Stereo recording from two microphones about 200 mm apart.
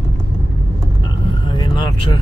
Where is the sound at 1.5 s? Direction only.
25° left (ahead or behind).